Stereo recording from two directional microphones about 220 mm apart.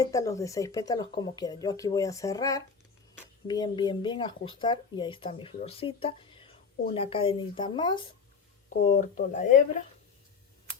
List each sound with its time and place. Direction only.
0.0 s speech: 15° left (ahead or behind)
8.9 s speech: 35° left (ahead or behind)